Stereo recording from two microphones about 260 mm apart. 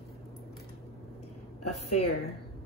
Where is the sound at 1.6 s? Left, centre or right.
Left.